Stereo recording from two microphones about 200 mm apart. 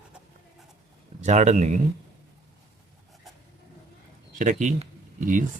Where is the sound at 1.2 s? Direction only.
35° right (ahead or behind).